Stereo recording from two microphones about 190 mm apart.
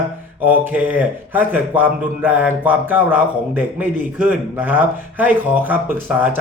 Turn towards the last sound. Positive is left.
turn(degrees=-10)  # may be behind; listen again after turning